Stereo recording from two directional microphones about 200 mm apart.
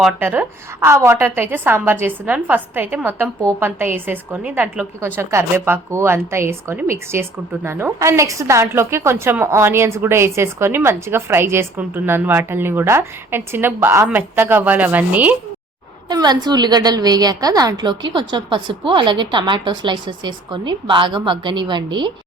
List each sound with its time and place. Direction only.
0.0 s a woman's voice: 10° right (ahead or behind)
16.0 s a woman's voice: 20° right (ahead or behind)